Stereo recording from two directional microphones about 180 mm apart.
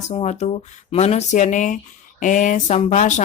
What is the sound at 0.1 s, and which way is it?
Speech, 35° left (ahead or behind).